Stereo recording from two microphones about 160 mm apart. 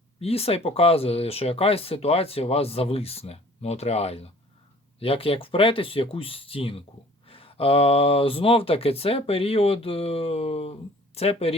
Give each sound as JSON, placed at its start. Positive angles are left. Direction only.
{"t": 0.2, "sound": "speech", "side_deg": 40}